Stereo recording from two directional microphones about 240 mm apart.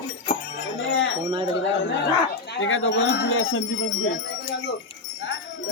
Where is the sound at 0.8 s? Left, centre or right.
Left.